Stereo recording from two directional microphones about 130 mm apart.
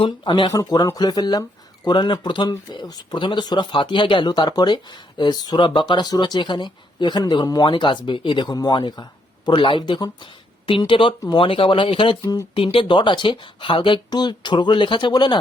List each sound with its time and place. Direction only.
0.0 s speech: 35° left (ahead or behind)
12.2 s speech: 25° left (ahead or behind)
12.5 s speech: 45° left (ahead or behind)